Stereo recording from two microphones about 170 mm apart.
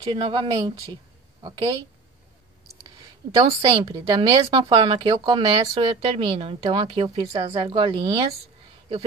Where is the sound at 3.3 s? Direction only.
25° right (ahead or behind).